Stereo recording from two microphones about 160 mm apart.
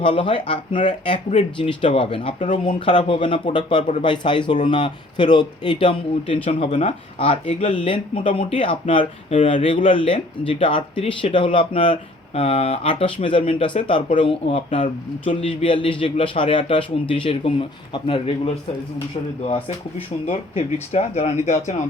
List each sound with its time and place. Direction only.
0.0 s speech: 30° left (ahead or behind)
20.9 s speech: 40° left (ahead or behind)